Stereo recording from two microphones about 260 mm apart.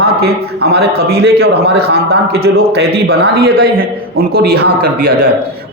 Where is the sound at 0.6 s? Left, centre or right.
Right.